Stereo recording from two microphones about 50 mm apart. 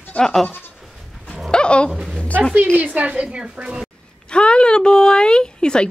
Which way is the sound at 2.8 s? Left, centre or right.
Right.